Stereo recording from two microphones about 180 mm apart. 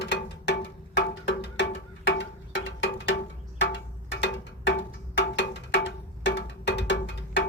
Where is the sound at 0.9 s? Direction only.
80° left.